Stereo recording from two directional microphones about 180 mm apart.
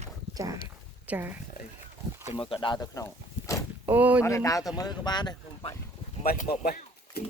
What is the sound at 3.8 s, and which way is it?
Speech, 10° right (ahead or behind).